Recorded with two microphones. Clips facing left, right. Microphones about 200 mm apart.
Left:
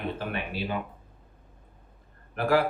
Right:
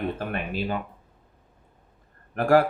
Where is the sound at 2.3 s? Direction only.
50° right (ahead or behind).